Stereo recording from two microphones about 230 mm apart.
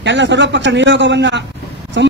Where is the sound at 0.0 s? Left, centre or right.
Right.